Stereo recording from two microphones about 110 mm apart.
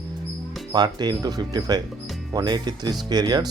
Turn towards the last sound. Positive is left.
turn(degrees=-40)  # may be behind; listen again after turning